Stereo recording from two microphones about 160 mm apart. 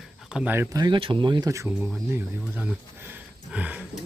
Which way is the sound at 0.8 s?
30° right (ahead or behind).